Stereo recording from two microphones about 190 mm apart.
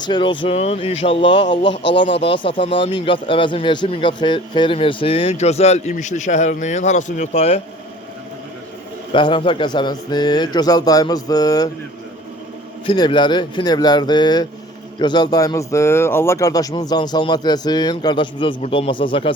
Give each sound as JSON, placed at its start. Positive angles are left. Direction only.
{"t": 0.0, "sound": "speech", "side_deg": 25}
{"t": 9.1, "sound": "speech", "side_deg": 25}
{"t": 12.8, "sound": "speech", "side_deg": 25}